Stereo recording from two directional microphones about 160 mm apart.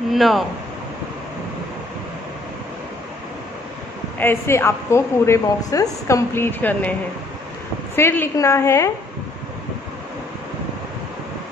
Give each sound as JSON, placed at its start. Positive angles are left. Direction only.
{"t": 0.1, "sound": "speech", "side_deg": 0}
{"t": 4.2, "sound": "a woman's voice", "side_deg": 15}